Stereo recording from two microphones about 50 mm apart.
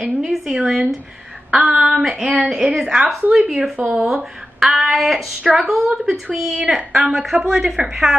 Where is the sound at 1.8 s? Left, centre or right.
Centre.